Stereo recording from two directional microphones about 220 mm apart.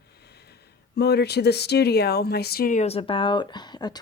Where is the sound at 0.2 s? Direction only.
50° left (ahead or behind).